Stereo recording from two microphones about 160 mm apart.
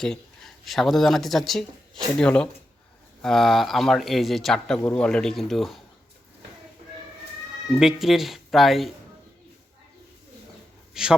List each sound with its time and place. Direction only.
0.0 s a man's voice: 5° left (ahead or behind)
7.7 s a man's voice: 5° right (ahead or behind)
11.0 s a man's voice: 5° right (ahead or behind)